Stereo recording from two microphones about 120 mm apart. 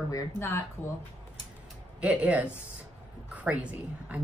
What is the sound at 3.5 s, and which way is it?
Speech, 10° right (ahead or behind).